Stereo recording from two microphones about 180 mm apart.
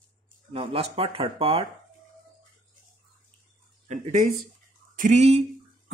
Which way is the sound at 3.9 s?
40° right (ahead or behind).